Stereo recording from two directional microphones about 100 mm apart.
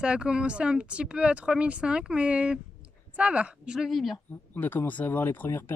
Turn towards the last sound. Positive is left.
turn(degrees=20)  # may be behind; listen again after turning